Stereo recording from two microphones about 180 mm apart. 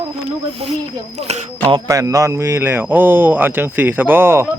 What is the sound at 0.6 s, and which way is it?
Speech, 35° right (ahead or behind).